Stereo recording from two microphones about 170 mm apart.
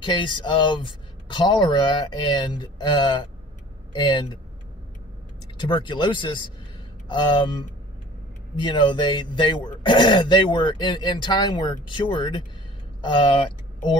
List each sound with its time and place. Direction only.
0.0 s speech: 30° left (ahead or behind)
5.6 s speech: 25° left (ahead or behind)
8.5 s speech: 25° left (ahead or behind)